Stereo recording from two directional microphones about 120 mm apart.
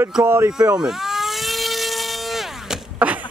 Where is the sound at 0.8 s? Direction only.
5° right (ahead or behind).